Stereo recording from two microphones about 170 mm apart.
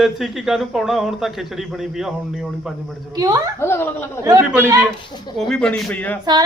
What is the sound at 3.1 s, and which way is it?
Speech, 20° right (ahead or behind).